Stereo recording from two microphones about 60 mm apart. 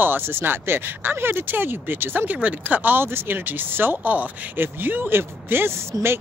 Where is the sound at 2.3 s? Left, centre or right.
Right.